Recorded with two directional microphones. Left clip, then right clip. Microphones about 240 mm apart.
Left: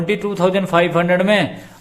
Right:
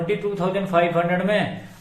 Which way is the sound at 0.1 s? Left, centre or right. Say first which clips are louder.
Left 8 dB; left.